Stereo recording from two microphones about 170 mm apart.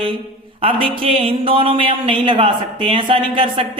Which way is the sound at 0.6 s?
35° right (ahead or behind).